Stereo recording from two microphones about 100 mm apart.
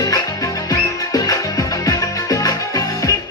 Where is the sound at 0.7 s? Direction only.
35° left (ahead or behind).